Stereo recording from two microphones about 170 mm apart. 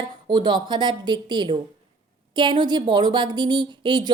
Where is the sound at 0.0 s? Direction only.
25° right (ahead or behind).